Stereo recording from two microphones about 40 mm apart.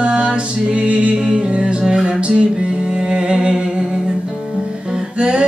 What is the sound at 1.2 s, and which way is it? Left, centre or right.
Music, right.